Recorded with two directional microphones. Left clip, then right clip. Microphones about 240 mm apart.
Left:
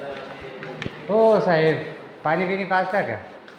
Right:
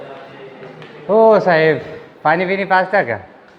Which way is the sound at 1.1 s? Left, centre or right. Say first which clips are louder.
Right 7 dB; right.